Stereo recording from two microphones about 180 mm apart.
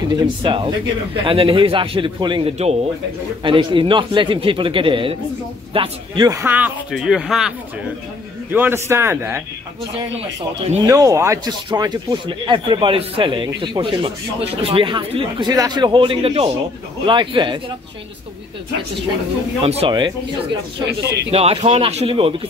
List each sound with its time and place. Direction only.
0.1 s a man's voice: 30° right (ahead or behind)
9.9 s speech: 35° right (ahead or behind)
10.8 s speech: 20° right (ahead or behind)
19.6 s speech: 35° right (ahead or behind)
21.0 s speech: 70° right (ahead or behind)
21.3 s speech: 35° right (ahead or behind)